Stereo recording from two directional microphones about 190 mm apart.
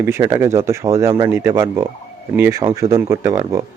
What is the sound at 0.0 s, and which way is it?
Speech, 15° right (ahead or behind).